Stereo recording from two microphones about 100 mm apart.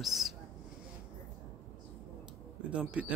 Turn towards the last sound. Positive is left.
turn(degrees=-10)  # may be behind; listen again after turning